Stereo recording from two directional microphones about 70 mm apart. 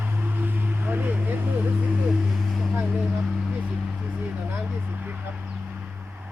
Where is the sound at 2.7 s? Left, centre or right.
Centre.